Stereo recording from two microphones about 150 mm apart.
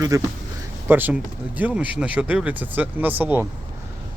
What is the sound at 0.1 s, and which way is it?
Speech, 20° right (ahead or behind).